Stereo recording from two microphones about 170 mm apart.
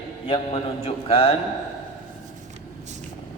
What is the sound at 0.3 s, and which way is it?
A man's voice, 35° left (ahead or behind).